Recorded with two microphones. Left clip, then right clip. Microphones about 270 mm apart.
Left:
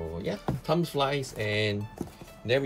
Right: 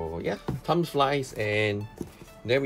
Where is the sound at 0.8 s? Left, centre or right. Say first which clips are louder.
Right 3 dB; right.